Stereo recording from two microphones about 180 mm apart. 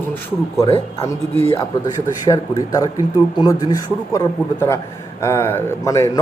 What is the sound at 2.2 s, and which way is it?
A man's voice, 20° left (ahead or behind).